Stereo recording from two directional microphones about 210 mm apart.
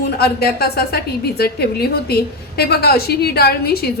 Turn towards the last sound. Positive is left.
turn(degrees=50)  # may be behind; listen again after turning